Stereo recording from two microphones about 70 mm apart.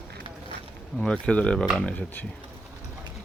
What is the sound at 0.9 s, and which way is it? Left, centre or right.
Speech, centre.